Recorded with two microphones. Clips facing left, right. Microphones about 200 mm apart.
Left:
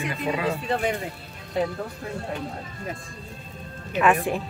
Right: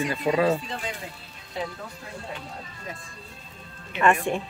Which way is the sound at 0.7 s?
60° left (ahead or behind).